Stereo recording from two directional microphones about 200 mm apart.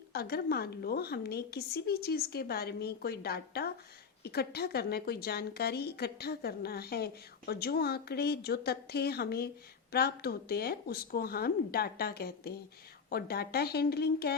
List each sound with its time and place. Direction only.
0.1 s a woman's voice: 50° left (ahead or behind)